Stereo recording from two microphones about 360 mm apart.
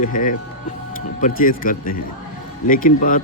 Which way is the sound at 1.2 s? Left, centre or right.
Left.